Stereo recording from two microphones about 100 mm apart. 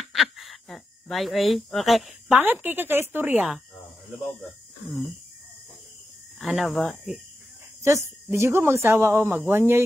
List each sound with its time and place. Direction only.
0.1 s a sound: centre (ahead or behind)
2.3 s speech: 20° right (ahead or behind)
6.4 s speech: 5° right (ahead or behind)
7.8 s speech: 25° right (ahead or behind)